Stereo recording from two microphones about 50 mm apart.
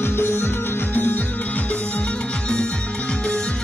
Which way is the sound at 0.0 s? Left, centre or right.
Left.